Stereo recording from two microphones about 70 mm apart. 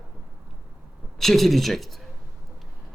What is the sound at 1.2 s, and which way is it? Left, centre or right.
Speech, centre.